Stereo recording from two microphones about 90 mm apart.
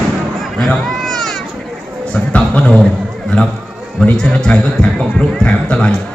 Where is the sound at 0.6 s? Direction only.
Centre (ahead or behind).